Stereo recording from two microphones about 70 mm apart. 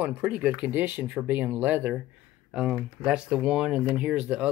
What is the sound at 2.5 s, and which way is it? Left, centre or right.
Speech, centre.